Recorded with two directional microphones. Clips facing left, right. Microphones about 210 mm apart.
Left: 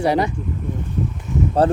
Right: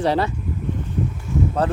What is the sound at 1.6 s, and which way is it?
Speech, 30° left (ahead or behind).